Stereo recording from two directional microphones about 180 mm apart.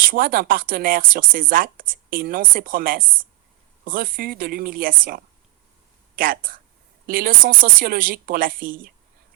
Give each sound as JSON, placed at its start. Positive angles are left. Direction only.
{"t": 0.0, "sound": "speech", "side_deg": -50}